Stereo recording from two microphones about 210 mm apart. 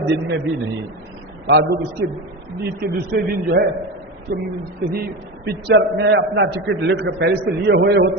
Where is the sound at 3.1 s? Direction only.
50° right (ahead or behind).